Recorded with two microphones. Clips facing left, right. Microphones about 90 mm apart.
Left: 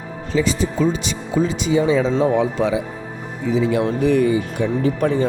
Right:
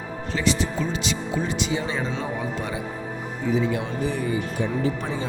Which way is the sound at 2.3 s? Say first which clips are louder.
Left 10 dB; 90° left.